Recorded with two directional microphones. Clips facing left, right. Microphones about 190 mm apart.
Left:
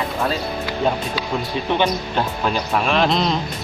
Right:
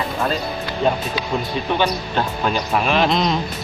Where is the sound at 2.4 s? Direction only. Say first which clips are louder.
Right 1 dB; centre (ahead or behind).